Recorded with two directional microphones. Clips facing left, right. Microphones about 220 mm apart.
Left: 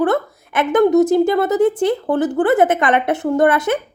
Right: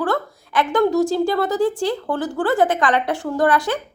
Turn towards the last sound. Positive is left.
turn(degrees=20)  # may be behind; listen again after turning